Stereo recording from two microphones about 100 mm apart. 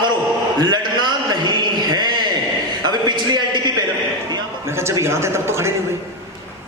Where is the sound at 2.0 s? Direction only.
45° right (ahead or behind).